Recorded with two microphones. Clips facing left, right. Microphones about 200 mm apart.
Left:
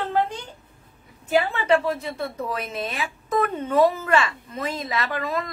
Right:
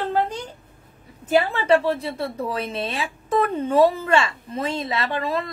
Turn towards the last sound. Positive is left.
turn(degrees=-30)  # may be behind; listen again after turning